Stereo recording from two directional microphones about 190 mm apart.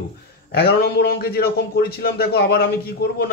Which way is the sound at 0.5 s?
55° left (ahead or behind).